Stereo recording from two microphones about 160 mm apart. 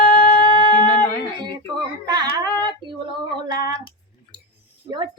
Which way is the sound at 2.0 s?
25° right (ahead or behind).